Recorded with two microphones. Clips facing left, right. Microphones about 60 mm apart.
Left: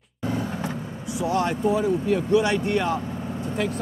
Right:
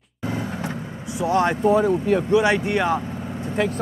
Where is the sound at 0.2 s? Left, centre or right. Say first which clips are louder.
Even; centre.